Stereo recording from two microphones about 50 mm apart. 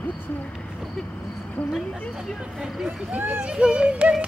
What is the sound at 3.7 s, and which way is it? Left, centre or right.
Music, right.